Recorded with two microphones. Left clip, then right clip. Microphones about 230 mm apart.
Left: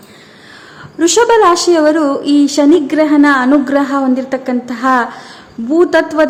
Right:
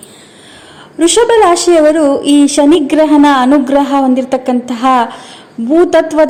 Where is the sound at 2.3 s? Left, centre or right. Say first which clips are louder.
Even; left.